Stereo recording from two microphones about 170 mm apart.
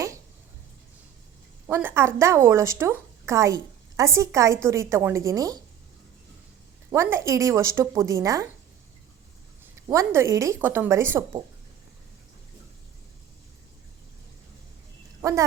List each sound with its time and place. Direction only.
1.6 s a woman's voice: 10° right (ahead or behind)
6.9 s a woman's voice: 15° right (ahead or behind)
9.7 s a woman's voice: 15° right (ahead or behind)
15.2 s speech: 20° right (ahead or behind)